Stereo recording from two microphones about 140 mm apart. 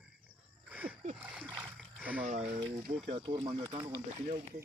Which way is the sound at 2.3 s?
50° right (ahead or behind).